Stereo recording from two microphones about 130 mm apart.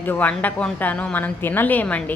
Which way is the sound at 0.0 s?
15° left (ahead or behind).